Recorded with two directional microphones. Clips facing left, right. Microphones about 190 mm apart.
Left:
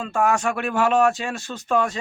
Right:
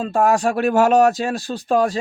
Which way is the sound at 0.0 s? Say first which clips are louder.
Right 4 dB; 35° right (ahead or behind).